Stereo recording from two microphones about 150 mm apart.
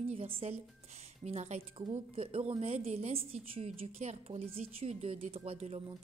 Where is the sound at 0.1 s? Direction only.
40° right (ahead or behind).